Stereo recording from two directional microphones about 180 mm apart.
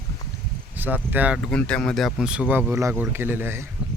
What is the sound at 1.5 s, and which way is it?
Speech, 5° left (ahead or behind).